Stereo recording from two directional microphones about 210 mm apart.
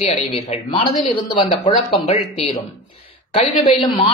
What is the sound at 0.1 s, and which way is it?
Speech, 30° left (ahead or behind).